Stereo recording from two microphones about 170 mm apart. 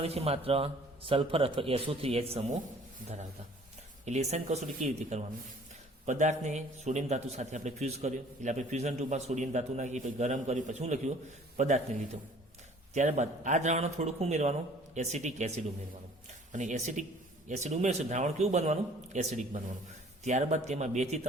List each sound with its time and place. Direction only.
0.0 s a man's voice: 35° right (ahead or behind)
4.0 s a man's voice: 40° right (ahead or behind)
12.9 s a man's voice: 45° right (ahead or behind)